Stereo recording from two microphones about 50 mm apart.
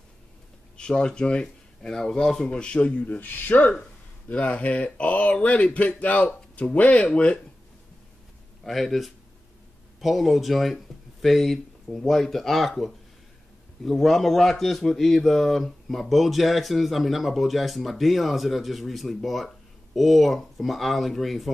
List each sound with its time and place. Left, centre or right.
0.7 s speech: centre
3.2 s speech: left
4.3 s speech: left
8.6 s a man's voice: centre